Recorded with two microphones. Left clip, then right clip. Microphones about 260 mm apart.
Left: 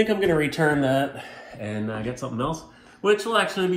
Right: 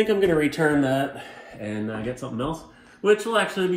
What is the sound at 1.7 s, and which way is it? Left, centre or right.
Speech, centre.